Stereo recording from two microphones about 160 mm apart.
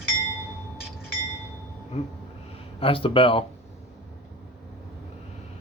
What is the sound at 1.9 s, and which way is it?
Speech, 40° left (ahead or behind).